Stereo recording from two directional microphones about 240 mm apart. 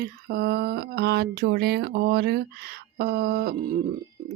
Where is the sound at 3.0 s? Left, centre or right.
Right.